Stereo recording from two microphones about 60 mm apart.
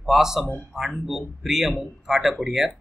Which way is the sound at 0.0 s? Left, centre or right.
Centre.